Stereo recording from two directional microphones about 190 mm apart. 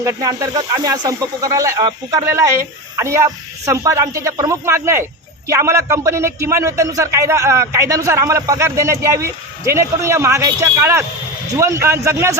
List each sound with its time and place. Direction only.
0.0 s a man's voice: 20° right (ahead or behind)